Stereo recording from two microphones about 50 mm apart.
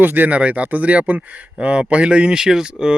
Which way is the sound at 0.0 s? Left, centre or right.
Right.